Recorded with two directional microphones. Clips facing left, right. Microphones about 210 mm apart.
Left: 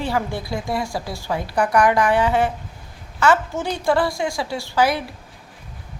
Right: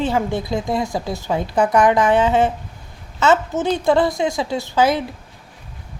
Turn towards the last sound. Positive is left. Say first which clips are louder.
# right 3 dB
turn(degrees=-20)  # may be behind; listen again after turning